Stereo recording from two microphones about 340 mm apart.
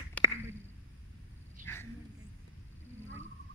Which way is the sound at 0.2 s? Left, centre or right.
Centre.